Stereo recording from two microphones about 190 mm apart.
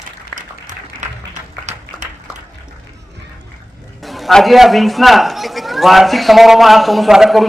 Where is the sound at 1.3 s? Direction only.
40° right (ahead or behind).